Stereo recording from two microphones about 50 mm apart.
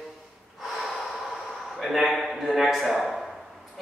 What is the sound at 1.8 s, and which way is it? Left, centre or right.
A man's voice, centre.